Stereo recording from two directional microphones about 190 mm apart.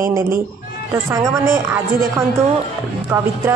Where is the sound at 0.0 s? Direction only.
15° right (ahead or behind).